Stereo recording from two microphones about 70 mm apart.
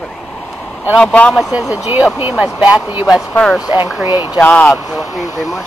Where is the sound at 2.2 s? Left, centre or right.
Centre.